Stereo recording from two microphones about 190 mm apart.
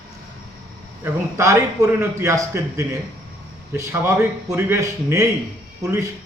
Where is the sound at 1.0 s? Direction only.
15° right (ahead or behind).